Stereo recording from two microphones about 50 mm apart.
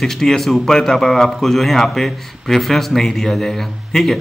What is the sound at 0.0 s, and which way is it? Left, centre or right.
A man's voice, centre.